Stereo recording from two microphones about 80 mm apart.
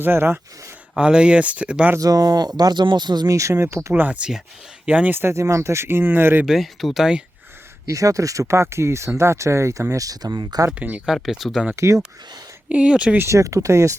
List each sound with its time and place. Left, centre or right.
0.0 s speech: right
0.9 s speech: centre
2.0 s speech: right
3.2 s speech: right
3.9 s speech: centre
6.4 s speech: centre
7.9 s speech: right
9.9 s speech: right
10.8 s speech: centre
11.0 s speech: centre
12.6 s speech: centre
13.1 s speech: right